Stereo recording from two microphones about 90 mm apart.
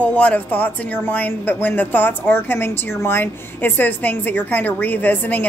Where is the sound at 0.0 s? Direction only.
15° left (ahead or behind).